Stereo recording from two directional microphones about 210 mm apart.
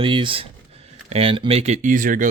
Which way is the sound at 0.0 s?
25° right (ahead or behind).